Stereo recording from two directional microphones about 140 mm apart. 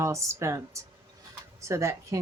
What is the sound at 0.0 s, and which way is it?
Speech, 20° right (ahead or behind).